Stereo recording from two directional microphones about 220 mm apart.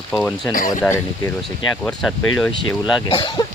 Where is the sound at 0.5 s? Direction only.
40° left (ahead or behind).